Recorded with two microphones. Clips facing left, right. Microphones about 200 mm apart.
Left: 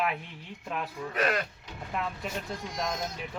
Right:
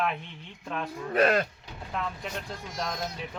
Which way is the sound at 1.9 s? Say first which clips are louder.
Even; 5° left (ahead or behind).